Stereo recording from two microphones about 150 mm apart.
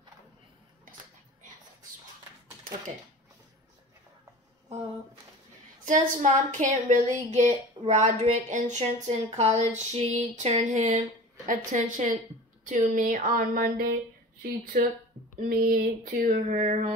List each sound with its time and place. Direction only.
5.9 s a woman's voice: 55° right (ahead or behind)
7.2 s a sound: 50° right (ahead or behind)
12.6 s a woman's voice: 60° right (ahead or behind)